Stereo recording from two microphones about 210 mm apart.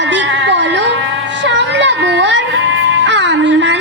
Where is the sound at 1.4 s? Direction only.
60° right (ahead or behind).